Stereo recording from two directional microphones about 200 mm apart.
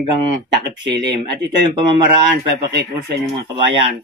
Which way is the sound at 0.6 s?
60° right (ahead or behind).